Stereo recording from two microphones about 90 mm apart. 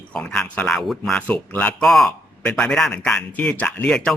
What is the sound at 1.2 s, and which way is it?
Speech, 15° left (ahead or behind).